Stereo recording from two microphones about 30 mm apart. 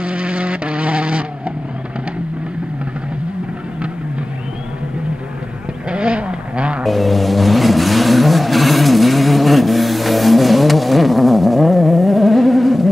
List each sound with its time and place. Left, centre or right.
0.0 s vehicle: right
5.9 s vehicle: right
6.8 s vehicle: centre